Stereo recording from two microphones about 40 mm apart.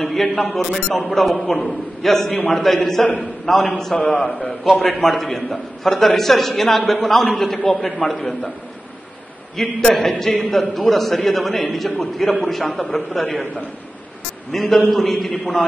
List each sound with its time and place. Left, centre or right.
0.0 s a man's voice: centre
9.6 s a man's voice: centre
10.9 s a man's voice: centre
14.5 s a man's voice: centre